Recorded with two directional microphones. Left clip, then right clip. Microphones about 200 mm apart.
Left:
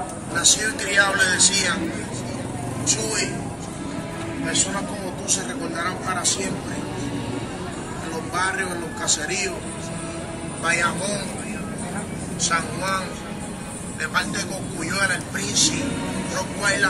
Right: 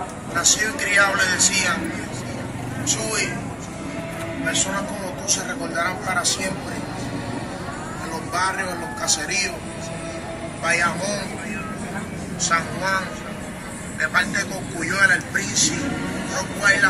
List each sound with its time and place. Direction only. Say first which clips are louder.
0.4 s speech: right 1 dB; 15° left (ahead or behind)
2.9 s speech: even; 10° left (ahead or behind)
5.3 s a man's voice: right 2 dB; 10° right (ahead or behind)
8.4 s a man's voice: right 1 dB; 10° right (ahead or behind)
10.6 s speech: right 1 dB; 5° left (ahead or behind)
12.4 s speech: right 2 dB; 15° left (ahead or behind)
13.9 s speech: right 4 dB; 30° left (ahead or behind)